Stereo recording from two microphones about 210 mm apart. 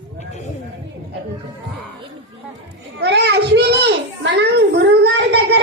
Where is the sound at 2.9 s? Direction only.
50° right (ahead or behind).